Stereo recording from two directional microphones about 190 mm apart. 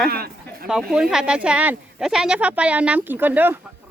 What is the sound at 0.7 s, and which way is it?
Speech, centre (ahead or behind).